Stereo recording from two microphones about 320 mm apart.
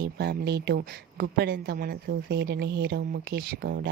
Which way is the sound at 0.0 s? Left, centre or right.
Right.